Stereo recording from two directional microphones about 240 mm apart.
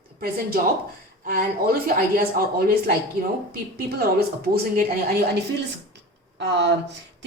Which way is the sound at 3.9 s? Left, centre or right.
Right.